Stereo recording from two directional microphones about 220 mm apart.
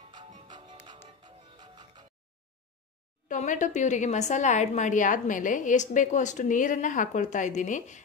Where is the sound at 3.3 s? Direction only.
35° left (ahead or behind).